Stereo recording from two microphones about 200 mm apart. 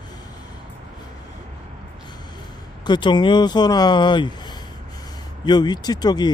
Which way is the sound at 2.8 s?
25° left (ahead or behind).